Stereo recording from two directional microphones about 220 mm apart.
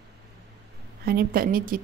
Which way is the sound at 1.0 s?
45° right (ahead or behind).